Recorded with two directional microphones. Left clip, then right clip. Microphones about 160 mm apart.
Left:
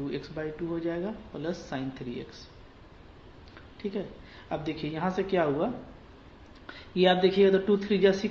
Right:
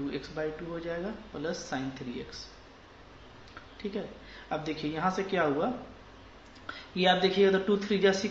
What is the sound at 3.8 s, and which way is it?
Speech, 35° left (ahead or behind).